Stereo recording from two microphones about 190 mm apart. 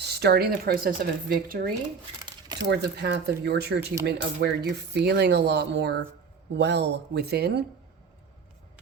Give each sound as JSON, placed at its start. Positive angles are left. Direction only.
{"t": 0.0, "sound": "speech", "side_deg": -60}
{"t": 2.6, "sound": "speech", "side_deg": -65}